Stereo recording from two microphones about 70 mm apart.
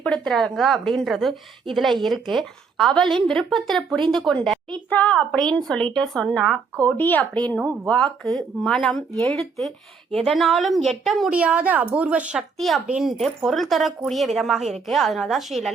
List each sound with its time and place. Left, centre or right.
0.0 s a woman's voice: centre
4.9 s a woman's voice: left
6.8 s speech: left
7.3 s a woman's voice: centre
11.3 s a woman's voice: centre
12.5 s a woman's voice: centre